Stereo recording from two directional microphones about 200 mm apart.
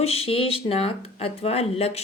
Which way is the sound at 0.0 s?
30° left (ahead or behind).